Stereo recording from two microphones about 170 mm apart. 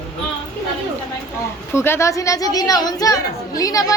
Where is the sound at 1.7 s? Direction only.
15° left (ahead or behind).